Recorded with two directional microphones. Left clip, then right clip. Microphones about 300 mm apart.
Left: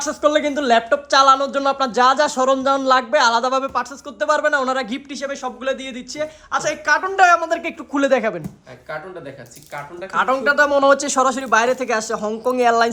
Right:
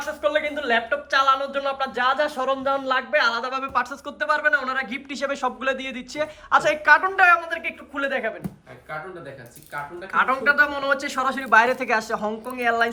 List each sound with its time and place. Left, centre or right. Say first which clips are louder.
0.0 s speech: left 6 dB; centre
5.1 s speech: right 2 dB; centre
10.1 s speech: left 2 dB; centre
12.5 s speech: left 7 dB; centre